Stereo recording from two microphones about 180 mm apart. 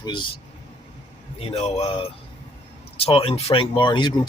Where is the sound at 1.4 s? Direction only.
35° left (ahead or behind).